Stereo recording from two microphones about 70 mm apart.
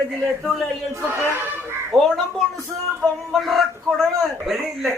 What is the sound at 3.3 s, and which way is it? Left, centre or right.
Speech, centre.